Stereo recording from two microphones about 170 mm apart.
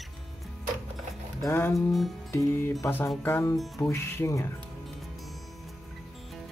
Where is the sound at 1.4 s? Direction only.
15° left (ahead or behind).